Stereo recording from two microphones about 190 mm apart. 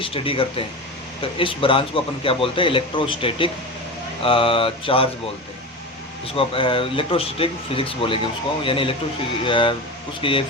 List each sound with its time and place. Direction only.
0.0 s speech: 30° left (ahead or behind)
6.2 s speech: 30° left (ahead or behind)